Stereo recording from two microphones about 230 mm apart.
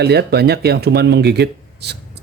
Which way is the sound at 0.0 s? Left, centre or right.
Right.